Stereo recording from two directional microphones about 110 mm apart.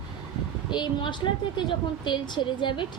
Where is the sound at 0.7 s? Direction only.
45° left (ahead or behind).